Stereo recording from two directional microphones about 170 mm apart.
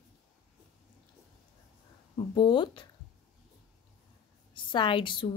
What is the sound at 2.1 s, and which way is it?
Speech, 30° left (ahead or behind).